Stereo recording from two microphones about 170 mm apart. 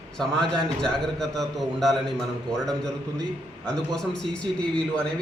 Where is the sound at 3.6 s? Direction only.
5° left (ahead or behind).